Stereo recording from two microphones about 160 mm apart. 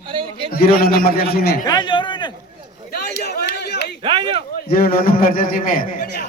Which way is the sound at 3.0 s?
90° left.